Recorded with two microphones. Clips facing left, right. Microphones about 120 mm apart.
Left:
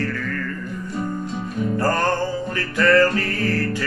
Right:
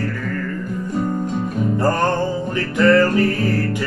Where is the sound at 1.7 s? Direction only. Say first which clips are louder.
Right 2 dB; 15° right (ahead or behind).